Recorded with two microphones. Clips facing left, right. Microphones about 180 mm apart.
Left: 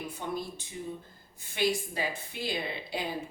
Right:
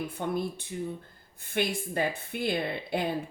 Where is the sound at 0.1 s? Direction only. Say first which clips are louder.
Right 5 dB; 55° right (ahead or behind).